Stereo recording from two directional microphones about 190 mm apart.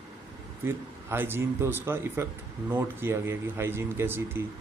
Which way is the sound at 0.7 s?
10° right (ahead or behind).